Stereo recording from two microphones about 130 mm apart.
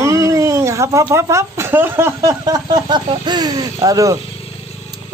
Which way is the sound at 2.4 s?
30° right (ahead or behind).